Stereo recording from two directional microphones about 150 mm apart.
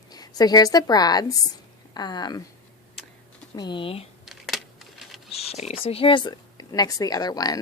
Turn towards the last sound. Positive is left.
turn(degrees=25)  # may be behind; listen again after turning